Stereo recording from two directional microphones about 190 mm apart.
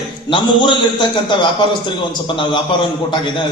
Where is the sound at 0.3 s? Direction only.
25° left (ahead or behind).